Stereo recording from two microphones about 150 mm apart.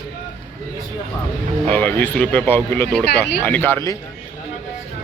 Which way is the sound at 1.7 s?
10° left (ahead or behind).